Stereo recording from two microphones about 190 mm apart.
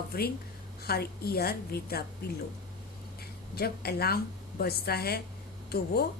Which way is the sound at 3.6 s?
55° left (ahead or behind).